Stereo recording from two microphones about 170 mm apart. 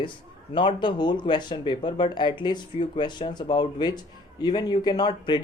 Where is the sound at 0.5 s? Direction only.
30° left (ahead or behind).